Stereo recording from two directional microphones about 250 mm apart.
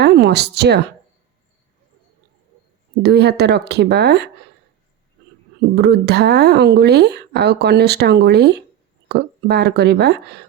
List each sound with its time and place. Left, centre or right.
0.0 s speech: right
3.0 s speech: right
5.7 s speech: right